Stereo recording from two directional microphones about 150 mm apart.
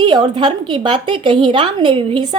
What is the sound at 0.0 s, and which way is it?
A woman's voice, 35° right (ahead or behind).